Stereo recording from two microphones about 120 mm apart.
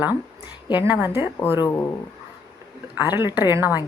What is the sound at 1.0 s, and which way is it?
Speech, 20° right (ahead or behind).